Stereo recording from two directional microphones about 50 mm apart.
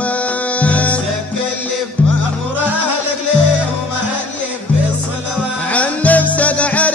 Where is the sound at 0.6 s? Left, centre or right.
Left.